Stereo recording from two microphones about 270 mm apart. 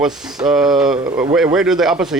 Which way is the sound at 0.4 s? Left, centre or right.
Centre.